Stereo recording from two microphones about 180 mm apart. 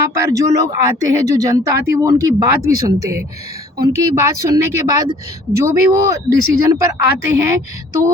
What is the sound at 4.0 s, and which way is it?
Speech, 15° right (ahead or behind).